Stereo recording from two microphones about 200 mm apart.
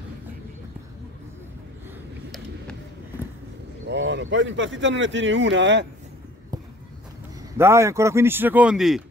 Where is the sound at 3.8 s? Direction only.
60° right (ahead or behind).